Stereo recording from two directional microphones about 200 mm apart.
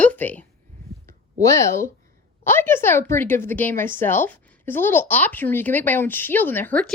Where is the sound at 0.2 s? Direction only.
10° left (ahead or behind).